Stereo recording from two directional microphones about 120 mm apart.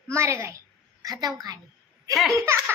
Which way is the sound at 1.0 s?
30° right (ahead or behind).